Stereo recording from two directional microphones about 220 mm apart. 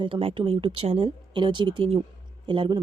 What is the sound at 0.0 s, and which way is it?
A woman's voice, 25° right (ahead or behind).